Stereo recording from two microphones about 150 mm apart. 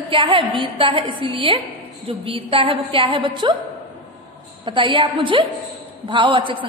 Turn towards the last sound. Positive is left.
turn(degrees=-35)  # may be behind; listen again after turning